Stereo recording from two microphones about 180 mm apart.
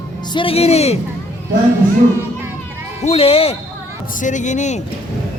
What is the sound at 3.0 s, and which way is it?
Speech, 30° left (ahead or behind).